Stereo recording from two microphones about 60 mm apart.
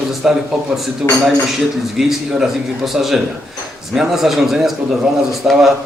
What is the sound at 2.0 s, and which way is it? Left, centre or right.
A man's voice, centre.